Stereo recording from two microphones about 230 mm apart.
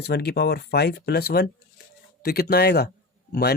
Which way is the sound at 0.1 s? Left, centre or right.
Left.